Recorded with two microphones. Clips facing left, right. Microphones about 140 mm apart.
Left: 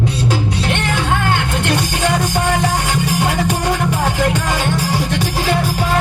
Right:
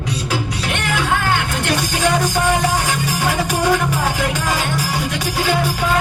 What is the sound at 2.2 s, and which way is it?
Music, 20° left (ahead or behind).